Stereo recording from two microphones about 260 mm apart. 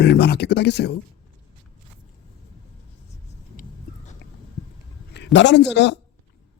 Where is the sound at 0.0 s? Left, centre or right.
Left.